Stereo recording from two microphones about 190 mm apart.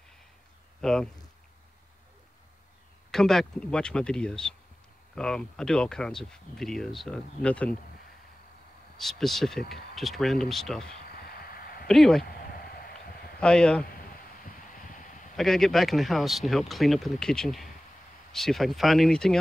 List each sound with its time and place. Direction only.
0.7 s speech: 5° left (ahead or behind)
3.1 s speech: centre (ahead or behind)
8.9 s speech: centre (ahead or behind)
11.2 s a sound: 50° left (ahead or behind)
11.9 s speech: centre (ahead or behind)
12.3 s a sound: 50° left (ahead or behind)
13.4 s speech: 5° left (ahead or behind)
14.1 s a sound: 45° left (ahead or behind)
15.3 s speech: centre (ahead or behind)